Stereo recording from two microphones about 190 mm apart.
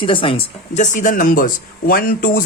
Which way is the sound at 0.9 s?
45° left (ahead or behind).